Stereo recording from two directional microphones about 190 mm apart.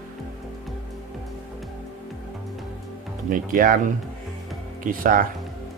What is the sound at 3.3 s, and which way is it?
Speech, 45° right (ahead or behind).